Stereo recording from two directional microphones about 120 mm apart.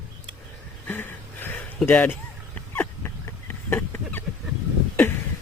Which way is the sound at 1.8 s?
10° left (ahead or behind).